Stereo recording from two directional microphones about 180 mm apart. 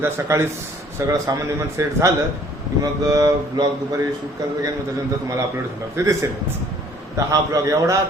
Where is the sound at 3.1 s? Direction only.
20° right (ahead or behind).